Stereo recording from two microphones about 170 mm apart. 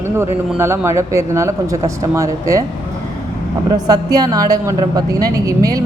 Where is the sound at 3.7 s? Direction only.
25° right (ahead or behind).